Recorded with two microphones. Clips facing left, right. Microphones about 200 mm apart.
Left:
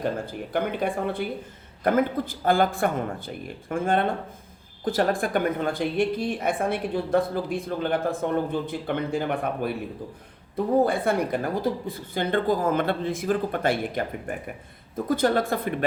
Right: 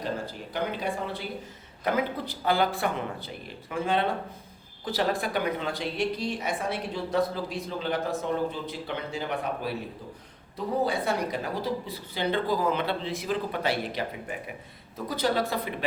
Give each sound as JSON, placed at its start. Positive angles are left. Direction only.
{"t": 0.5, "sound": "a woman's voice", "side_deg": 55}
{"t": 10.8, "sound": "a woman's voice", "side_deg": 55}